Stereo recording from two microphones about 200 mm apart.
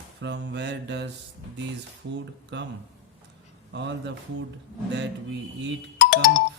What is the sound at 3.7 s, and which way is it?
Speech, 60° right (ahead or behind).